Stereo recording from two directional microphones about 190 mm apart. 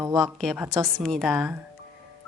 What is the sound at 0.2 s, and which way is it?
Speech, centre (ahead or behind).